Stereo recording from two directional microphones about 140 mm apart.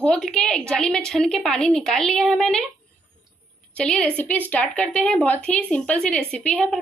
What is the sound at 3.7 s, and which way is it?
A woman's voice, 10° left (ahead or behind).